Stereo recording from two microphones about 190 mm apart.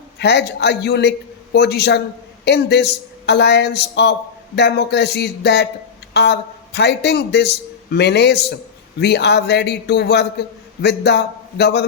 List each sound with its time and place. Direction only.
0.2 s speech: 60° left (ahead or behind)